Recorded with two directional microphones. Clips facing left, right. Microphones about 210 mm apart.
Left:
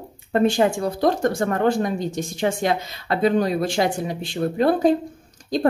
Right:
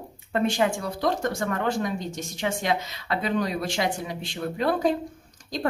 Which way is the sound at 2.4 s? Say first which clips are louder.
Left 4 dB; 45° left (ahead or behind).